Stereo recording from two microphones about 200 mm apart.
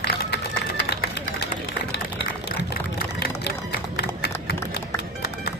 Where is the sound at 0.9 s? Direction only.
55° left (ahead or behind).